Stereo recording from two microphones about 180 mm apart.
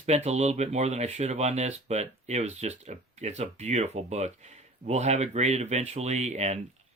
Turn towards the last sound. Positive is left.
turn(degrees=-40)  # may be behind; listen again after turning